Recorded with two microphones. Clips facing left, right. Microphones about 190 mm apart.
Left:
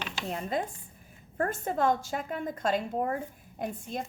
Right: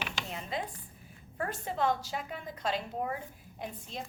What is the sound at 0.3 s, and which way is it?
A woman's voice, 45° left (ahead or behind).